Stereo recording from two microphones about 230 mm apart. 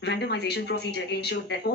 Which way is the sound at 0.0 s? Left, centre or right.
Left.